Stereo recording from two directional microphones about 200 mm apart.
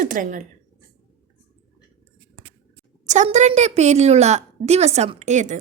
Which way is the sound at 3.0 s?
35° right (ahead or behind).